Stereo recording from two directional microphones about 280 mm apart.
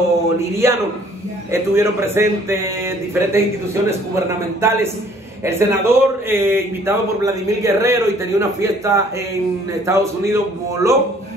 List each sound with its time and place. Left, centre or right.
0.4 s a man's voice: centre